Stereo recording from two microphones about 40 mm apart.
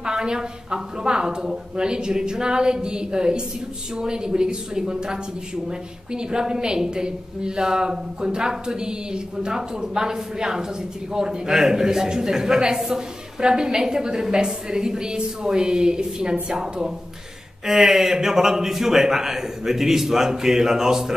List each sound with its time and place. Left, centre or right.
0.0 s a woman's voice: right